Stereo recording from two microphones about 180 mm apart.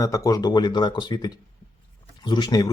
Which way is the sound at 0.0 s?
20° left (ahead or behind).